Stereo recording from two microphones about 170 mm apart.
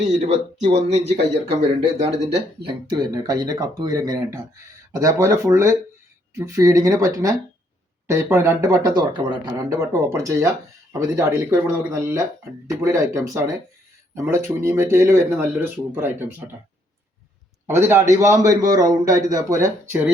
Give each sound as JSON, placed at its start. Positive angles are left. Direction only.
{"t": 0.2, "sound": "a man's voice", "side_deg": -40}
{"t": 17.7, "sound": "a man's voice", "side_deg": -15}